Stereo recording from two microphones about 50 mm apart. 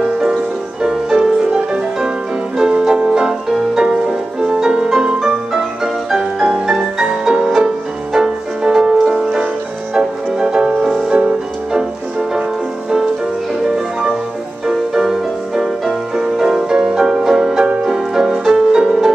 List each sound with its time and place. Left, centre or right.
0.0 s music: centre
2.5 s music: centre
14.7 s music: centre